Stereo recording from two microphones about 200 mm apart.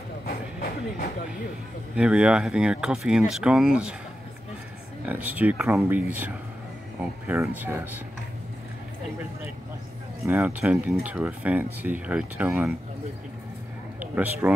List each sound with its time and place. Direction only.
0.3 s train: 45° left (ahead or behind)
2.0 s speech: 5° right (ahead or behind)
5.0 s speech: 10° right (ahead or behind)
10.2 s speech: 15° right (ahead or behind)
13.9 s a man's voice: 10° right (ahead or behind)